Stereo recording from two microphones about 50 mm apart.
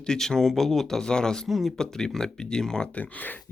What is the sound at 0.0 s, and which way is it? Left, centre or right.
Speech, centre.